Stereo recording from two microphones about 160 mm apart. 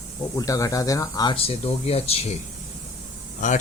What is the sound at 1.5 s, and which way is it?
Speech, 40° left (ahead or behind).